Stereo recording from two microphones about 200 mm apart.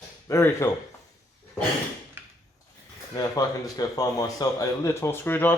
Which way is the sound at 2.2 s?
10° right (ahead or behind).